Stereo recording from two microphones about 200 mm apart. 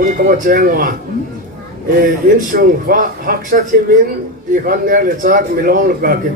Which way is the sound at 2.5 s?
45° right (ahead or behind).